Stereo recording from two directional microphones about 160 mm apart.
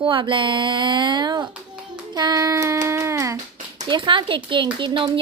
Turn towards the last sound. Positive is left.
turn(degrees=-30)  # may be behind; listen again after turning